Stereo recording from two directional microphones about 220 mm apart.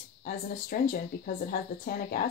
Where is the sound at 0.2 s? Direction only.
40° left (ahead or behind).